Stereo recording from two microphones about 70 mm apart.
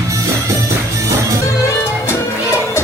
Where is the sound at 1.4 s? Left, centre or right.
Left.